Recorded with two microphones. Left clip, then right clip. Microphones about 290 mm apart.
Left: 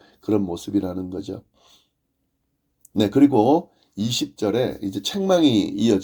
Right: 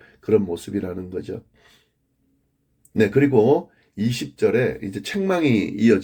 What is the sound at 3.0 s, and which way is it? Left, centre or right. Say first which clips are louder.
Speech: even; left.